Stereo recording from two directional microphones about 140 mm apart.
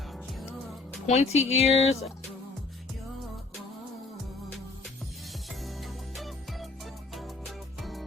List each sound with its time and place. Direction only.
1.0 s speech: 55° left (ahead or behind)
6.1 s music: centre (ahead or behind)
7.8 s music: centre (ahead or behind)